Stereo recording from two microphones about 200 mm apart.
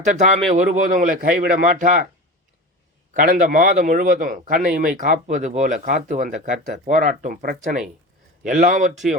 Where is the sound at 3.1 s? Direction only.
40° right (ahead or behind).